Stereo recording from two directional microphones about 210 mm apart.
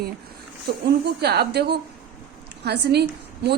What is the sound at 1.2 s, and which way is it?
A woman's voice, 50° right (ahead or behind).